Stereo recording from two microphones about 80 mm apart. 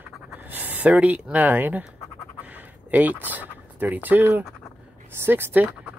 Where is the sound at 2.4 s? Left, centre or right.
Right.